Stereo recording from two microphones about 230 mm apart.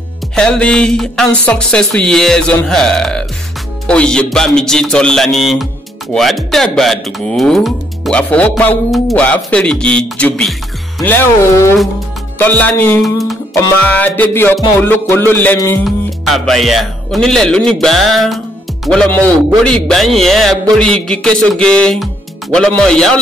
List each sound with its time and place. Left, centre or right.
0.4 s speech: centre
11.0 s music: centre
15.8 s speech: centre